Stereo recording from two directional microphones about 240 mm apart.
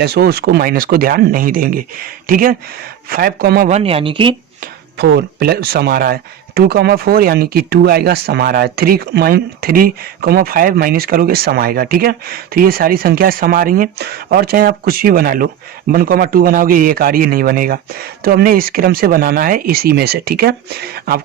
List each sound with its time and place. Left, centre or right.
0.0 s speech: right
3.7 s speech: right
4.9 s speech: right